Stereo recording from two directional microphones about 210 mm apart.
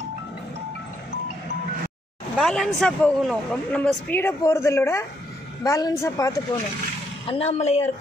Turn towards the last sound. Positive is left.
turn(degrees=30)  # may be behind; listen again after turning